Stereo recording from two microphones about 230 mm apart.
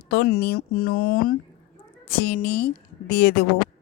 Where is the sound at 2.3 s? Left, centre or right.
Left.